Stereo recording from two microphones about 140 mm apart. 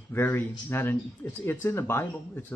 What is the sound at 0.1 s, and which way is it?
Speech, 15° left (ahead or behind).